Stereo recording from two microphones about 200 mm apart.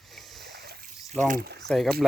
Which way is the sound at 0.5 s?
50° right (ahead or behind).